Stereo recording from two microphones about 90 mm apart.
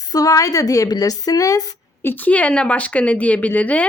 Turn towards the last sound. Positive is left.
turn(degrees=15)  # may be behind; listen again after turning